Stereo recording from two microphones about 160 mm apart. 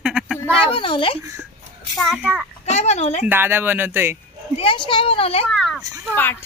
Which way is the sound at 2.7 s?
45° left (ahead or behind).